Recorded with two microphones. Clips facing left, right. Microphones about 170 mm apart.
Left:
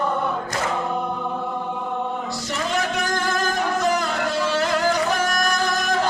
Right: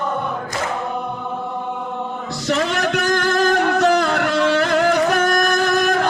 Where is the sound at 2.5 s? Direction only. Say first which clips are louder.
Right 7 dB; 75° right (ahead or behind); by 5.5 s 60° right (ahead or behind).